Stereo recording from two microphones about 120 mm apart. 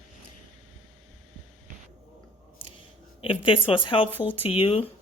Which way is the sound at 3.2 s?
50° left (ahead or behind).